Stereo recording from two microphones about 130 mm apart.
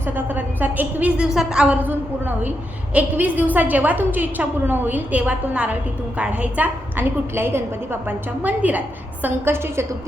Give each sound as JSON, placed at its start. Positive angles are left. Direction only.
{"t": 0.0, "sound": "a woman's voice", "side_deg": -15}